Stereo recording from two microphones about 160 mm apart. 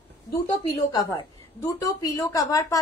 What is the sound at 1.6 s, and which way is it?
A woman's voice, 20° left (ahead or behind).